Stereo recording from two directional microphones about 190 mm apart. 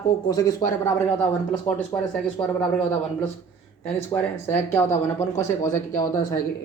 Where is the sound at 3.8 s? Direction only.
10° left (ahead or behind).